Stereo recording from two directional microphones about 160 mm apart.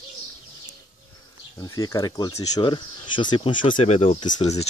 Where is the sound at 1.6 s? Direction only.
20° left (ahead or behind); by 4.2 s 40° left (ahead or behind).